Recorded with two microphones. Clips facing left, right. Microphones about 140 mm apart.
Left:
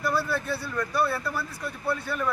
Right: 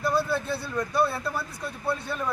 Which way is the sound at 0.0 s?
25° right (ahead or behind).